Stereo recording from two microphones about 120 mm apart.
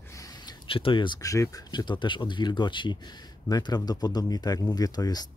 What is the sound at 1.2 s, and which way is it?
Speech, 30° left (ahead or behind).